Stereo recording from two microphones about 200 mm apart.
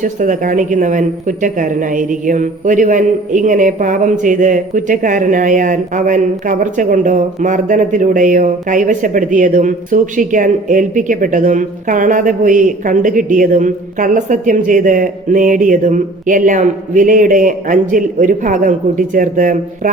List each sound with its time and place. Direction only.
0.0 s speech: 40° right (ahead or behind)